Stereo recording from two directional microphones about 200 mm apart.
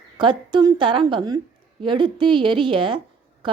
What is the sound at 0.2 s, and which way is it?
Speech, 25° right (ahead or behind).